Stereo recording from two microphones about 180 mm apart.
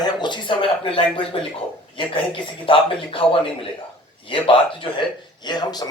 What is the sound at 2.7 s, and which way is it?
Speech, 30° left (ahead or behind).